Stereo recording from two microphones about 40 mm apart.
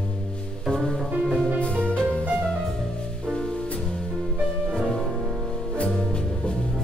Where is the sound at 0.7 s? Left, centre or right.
Centre.